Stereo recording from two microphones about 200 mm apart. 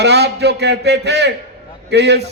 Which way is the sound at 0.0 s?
55° right (ahead or behind).